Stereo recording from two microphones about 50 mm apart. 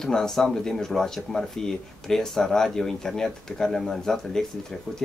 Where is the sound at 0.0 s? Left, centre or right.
Centre.